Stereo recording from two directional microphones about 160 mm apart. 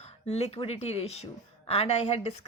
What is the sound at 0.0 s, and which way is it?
A woman's voice, 40° left (ahead or behind).